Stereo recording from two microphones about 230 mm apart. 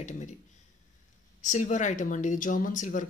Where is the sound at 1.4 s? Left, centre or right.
Left.